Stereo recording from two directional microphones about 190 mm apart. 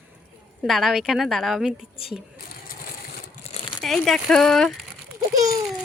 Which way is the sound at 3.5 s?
35° left (ahead or behind).